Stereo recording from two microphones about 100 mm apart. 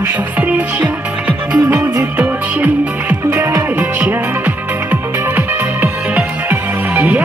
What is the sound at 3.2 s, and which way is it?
Music, 30° right (ahead or behind).